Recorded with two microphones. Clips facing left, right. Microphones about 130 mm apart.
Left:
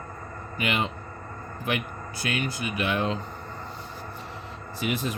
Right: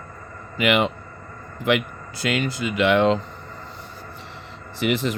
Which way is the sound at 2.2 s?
90° right.